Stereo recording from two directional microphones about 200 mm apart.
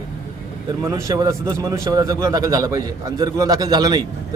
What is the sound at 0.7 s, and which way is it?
A man's voice, 15° right (ahead or behind).